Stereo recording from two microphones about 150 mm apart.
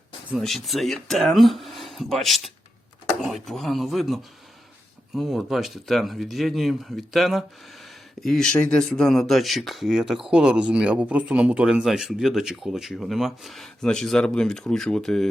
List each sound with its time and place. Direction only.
0.3 s speech: centre (ahead or behind)